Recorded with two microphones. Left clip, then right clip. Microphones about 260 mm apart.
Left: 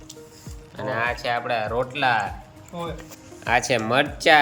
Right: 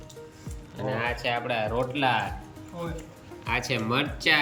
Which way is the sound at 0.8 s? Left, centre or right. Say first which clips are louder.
Left 4 dB; centre.